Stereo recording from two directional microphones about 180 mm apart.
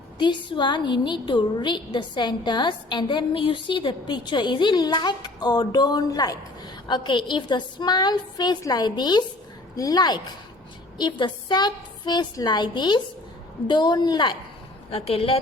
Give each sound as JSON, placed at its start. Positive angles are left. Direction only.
{"t": 0.2, "sound": "a woman's voice", "side_deg": 25}